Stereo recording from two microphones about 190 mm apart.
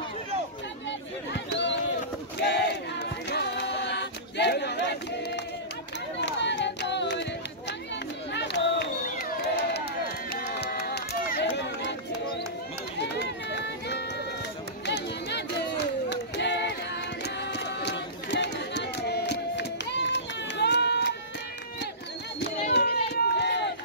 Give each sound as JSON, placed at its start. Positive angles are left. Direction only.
{"t": 1.3, "sound": "a sound", "side_deg": 65}
{"t": 2.4, "sound": "choir", "side_deg": 60}
{"t": 6.2, "sound": "a sound", "side_deg": 70}
{"t": 8.3, "sound": "run", "side_deg": 65}
{"t": 13.1, "sound": "run", "side_deg": 65}
{"t": 14.9, "sound": "music", "side_deg": 65}
{"t": 16.1, "sound": "clapping", "side_deg": 65}
{"t": 17.2, "sound": "a sound", "side_deg": 60}
{"t": 22.4, "sound": "run", "side_deg": 55}